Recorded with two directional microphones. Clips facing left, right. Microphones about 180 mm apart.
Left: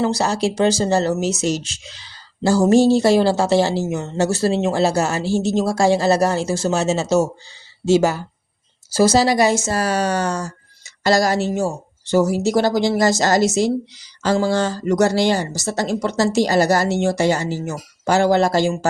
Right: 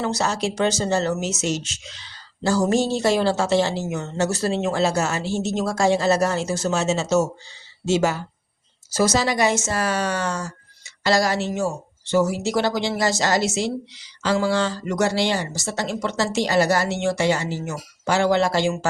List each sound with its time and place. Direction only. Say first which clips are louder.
0.0 s a woman's voice: left 5 dB; 30° left (ahead or behind)